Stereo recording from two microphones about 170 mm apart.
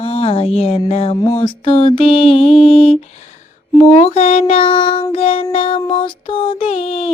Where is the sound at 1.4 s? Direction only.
30° left (ahead or behind).